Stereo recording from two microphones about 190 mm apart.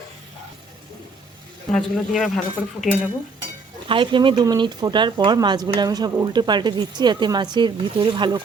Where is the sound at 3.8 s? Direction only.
25° right (ahead or behind).